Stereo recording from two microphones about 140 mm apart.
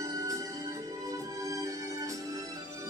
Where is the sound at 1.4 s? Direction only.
25° right (ahead or behind).